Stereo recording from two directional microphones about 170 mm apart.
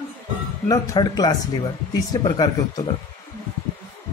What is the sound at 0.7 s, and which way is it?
Speech, 20° left (ahead or behind).